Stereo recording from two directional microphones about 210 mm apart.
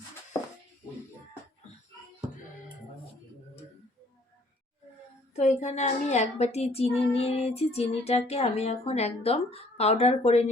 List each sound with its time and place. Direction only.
5.4 s child singing: 30° left (ahead or behind)